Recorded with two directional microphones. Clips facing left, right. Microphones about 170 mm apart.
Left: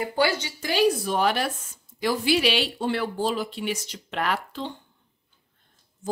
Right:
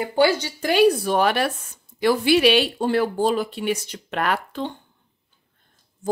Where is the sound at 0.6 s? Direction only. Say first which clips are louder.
Right 5 dB; 60° right (ahead or behind).